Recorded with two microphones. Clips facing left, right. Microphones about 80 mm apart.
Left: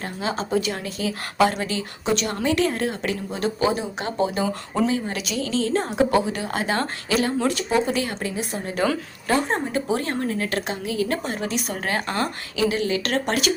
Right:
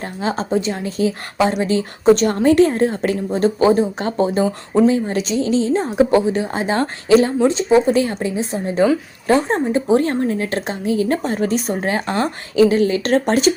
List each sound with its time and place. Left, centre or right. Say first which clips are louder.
0.0 s a woman's voice: right 5 dB; right
11.7 s a woman's voice: right 6 dB; right